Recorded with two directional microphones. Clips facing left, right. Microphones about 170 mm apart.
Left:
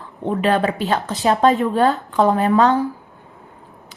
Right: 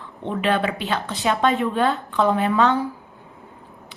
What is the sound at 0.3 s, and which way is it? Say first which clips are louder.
A woman's voice: left 4 dB; 40° left (ahead or behind).